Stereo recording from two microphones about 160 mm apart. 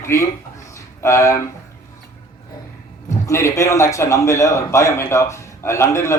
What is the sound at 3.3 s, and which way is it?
A man's voice, 20° left (ahead or behind).